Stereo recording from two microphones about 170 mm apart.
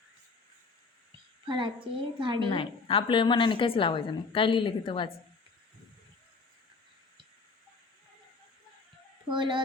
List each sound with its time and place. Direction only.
1.5 s a woman's voice: 30° right (ahead or behind)
2.5 s a woman's voice: 30° left (ahead or behind)
9.3 s a woman's voice: 30° right (ahead or behind)